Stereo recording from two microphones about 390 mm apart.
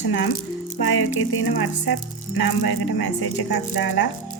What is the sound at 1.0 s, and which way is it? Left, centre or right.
Speech, left.